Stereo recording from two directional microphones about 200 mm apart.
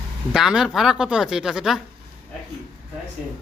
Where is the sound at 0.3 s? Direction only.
5° right (ahead or behind).